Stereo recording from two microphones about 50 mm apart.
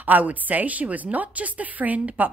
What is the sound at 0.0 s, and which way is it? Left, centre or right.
A woman's voice, right.